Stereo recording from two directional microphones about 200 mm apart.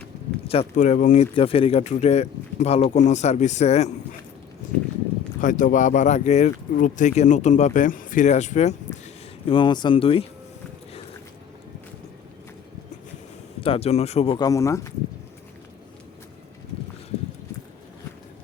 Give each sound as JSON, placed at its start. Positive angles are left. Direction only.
{"t": 0.4, "sound": "speech", "side_deg": 30}
{"t": 5.4, "sound": "speech", "side_deg": 40}
{"t": 9.5, "sound": "speech", "side_deg": 25}
{"t": 13.6, "sound": "speech", "side_deg": 30}
{"t": 14.3, "sound": "speech", "side_deg": 15}